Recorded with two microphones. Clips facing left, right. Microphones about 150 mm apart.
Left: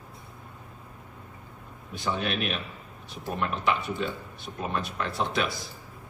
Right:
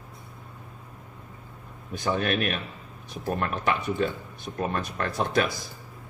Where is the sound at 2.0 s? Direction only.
50° right (ahead or behind).